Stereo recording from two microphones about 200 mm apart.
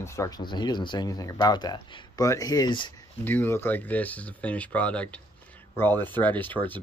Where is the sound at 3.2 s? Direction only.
10° left (ahead or behind).